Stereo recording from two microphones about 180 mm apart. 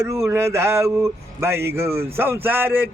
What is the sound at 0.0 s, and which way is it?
Speech, 15° right (ahead or behind).